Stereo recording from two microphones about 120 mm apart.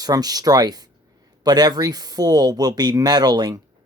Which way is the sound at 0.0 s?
30° right (ahead or behind).